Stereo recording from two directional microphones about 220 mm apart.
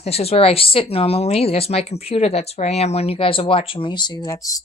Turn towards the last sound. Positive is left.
turn(degrees=15)  # may be behind; listen again after turning